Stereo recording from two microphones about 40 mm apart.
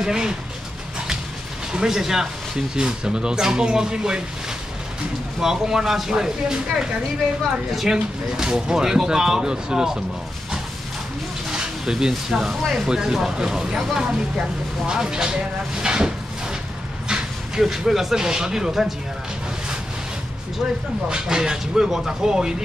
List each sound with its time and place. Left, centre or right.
0.0 s speech: centre
1.7 s speech: centre
5.4 s speech: centre
7.9 s speech: centre
11.5 s a sound: centre
12.1 s speech: centre
17.1 s speech: centre
21.1 s speech: centre